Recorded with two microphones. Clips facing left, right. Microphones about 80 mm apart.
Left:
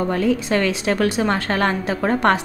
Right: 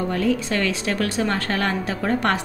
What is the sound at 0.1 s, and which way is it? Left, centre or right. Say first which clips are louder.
A woman's voice: left 3 dB; left.